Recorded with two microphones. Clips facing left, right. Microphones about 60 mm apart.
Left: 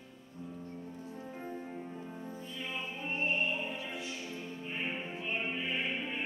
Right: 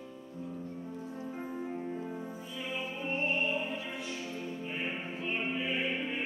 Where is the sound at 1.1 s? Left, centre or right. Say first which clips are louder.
Right 3 dB; centre.